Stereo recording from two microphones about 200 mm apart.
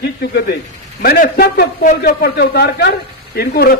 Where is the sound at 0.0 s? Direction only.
55° left (ahead or behind).